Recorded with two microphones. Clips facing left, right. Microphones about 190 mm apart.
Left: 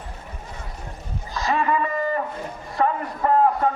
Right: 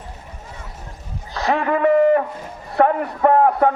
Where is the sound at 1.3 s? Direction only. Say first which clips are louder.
Right 3 dB; 65° right (ahead or behind).